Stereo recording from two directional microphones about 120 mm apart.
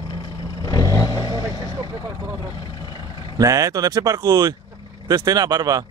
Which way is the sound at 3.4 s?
30° right (ahead or behind).